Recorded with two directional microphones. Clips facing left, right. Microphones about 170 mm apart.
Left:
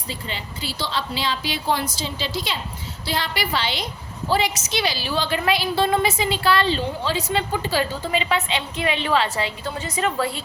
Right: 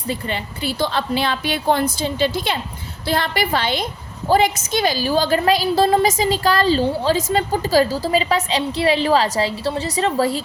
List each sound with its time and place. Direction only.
0.1 s a woman's voice: 55° right (ahead or behind); by 10.4 s 35° right (ahead or behind)